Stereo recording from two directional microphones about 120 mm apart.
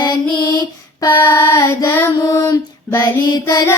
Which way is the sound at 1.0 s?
15° left (ahead or behind).